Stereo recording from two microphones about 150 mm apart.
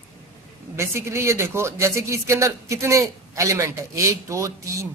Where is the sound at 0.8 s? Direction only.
15° right (ahead or behind).